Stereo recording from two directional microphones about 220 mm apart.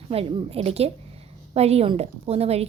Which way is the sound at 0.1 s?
25° right (ahead or behind).